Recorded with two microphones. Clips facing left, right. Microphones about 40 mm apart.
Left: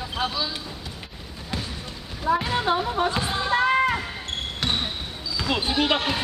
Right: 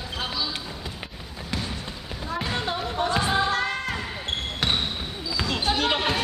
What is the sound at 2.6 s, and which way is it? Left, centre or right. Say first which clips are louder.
Music: left 4 dB; centre.